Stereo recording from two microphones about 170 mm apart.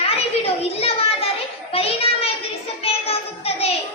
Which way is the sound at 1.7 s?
35° left (ahead or behind).